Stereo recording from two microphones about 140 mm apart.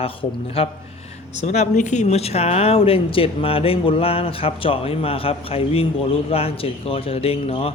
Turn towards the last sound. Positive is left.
turn(degrees=45)  # may be behind; listen again after turning